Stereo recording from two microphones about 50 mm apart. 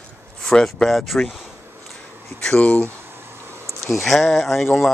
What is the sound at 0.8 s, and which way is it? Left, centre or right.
Speech, centre.